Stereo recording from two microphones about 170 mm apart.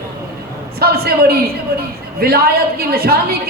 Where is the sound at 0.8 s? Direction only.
65° right (ahead or behind).